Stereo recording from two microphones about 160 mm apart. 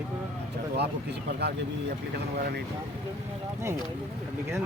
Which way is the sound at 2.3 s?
70° right (ahead or behind).